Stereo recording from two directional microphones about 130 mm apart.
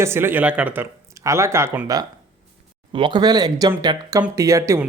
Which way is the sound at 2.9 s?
40° right (ahead or behind).